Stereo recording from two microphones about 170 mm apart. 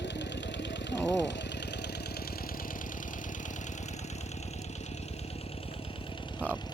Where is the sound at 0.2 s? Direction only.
90° left.